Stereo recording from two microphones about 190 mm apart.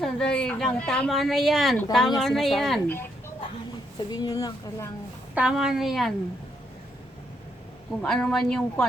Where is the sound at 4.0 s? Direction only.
20° left (ahead or behind).